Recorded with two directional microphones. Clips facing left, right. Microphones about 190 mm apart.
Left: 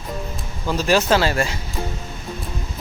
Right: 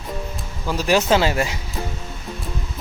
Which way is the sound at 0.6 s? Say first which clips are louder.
Even; 10° right (ahead or behind).